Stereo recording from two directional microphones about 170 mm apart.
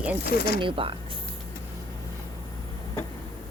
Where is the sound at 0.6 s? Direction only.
30° right (ahead or behind).